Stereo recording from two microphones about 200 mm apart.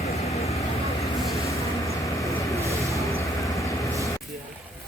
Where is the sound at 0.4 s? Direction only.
15° left (ahead or behind).